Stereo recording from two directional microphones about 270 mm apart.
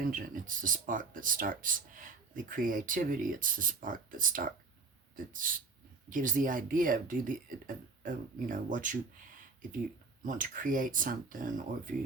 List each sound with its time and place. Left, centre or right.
0.0 s speech: right
10.2 s speech: right